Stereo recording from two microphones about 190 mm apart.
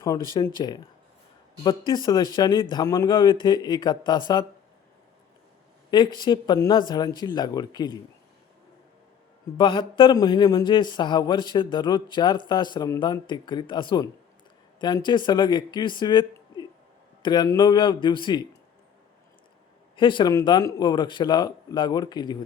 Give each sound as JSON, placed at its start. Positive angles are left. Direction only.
{"t": 0.3, "sound": "a man's voice", "side_deg": 20}
{"t": 1.9, "sound": "a man's voice", "side_deg": 20}
{"t": 5.9, "sound": "a man's voice", "side_deg": 25}
{"t": 9.6, "sound": "a man's voice", "side_deg": 25}
{"t": 20.0, "sound": "a man's voice", "side_deg": 25}